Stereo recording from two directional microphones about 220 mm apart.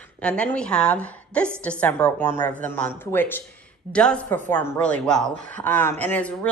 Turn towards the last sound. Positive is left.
turn(degrees=5)  # may be behind; listen again after turning